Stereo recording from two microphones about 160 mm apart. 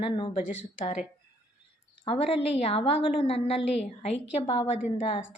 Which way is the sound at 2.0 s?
40° left (ahead or behind).